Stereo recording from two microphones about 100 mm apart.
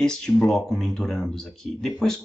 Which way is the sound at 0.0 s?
5° left (ahead or behind).